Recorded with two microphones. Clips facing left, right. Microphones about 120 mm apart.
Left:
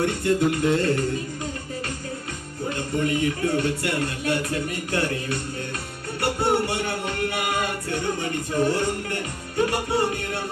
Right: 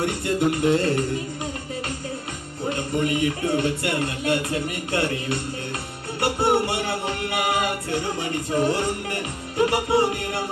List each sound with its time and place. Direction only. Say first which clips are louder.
0.0 s music: left 1 dB; 20° right (ahead or behind)
2.6 s music: right 1 dB; 20° right (ahead or behind)